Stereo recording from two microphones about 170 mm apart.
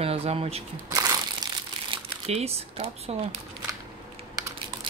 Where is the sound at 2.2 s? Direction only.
35° right (ahead or behind).